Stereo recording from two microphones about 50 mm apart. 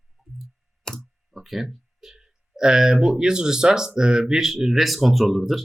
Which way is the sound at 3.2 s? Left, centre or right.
Centre.